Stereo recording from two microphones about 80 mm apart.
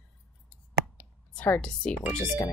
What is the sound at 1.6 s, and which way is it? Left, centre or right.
Speech, centre.